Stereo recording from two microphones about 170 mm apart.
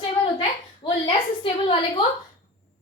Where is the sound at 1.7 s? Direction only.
30° left (ahead or behind).